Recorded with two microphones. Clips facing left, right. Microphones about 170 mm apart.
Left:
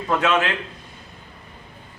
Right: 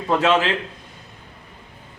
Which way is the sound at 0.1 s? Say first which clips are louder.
Right 2 dB; 30° right (ahead or behind).